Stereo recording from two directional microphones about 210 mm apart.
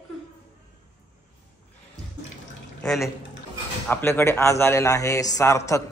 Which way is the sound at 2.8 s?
Centre (ahead or behind).